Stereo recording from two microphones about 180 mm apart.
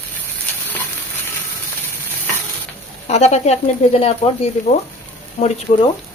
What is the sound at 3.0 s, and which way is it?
Speech, 35° left (ahead or behind).